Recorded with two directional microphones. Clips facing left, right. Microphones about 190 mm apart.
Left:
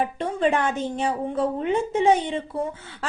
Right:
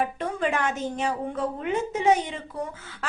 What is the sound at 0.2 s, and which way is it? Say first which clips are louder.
Speech: left 4 dB; 30° left (ahead or behind).